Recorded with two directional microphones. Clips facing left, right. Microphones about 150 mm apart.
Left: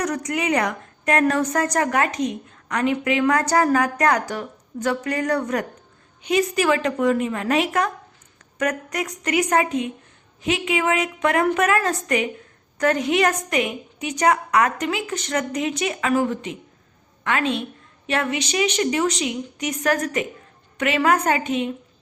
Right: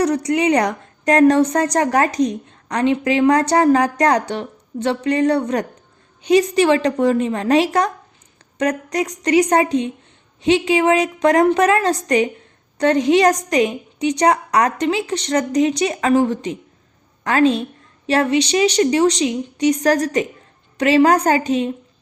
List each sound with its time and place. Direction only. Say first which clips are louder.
0.0 s a woman's voice: right 7 dB; 30° right (ahead or behind)